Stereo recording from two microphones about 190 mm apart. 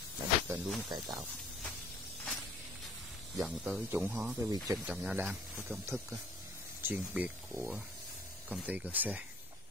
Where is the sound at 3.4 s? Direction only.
5° right (ahead or behind).